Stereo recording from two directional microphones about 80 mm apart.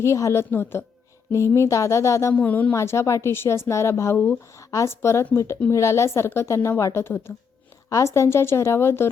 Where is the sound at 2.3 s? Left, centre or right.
Left.